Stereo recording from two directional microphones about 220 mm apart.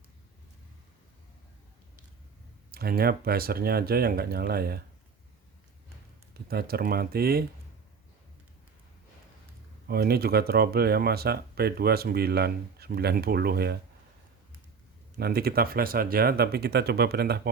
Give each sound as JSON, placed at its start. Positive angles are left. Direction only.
{"t": 2.7, "sound": "speech", "side_deg": -45}
{"t": 6.5, "sound": "speech", "side_deg": -45}
{"t": 9.8, "sound": "speech", "side_deg": -45}
{"t": 15.2, "sound": "speech", "side_deg": -45}